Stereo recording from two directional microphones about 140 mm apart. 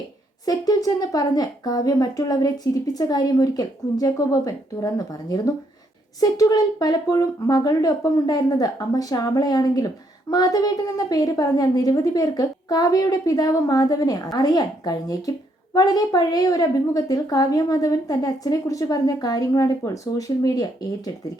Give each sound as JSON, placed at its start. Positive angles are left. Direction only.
{"t": 0.4, "sound": "speech", "side_deg": 25}